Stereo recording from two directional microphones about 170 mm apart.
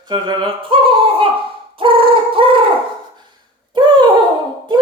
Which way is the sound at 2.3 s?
30° right (ahead or behind).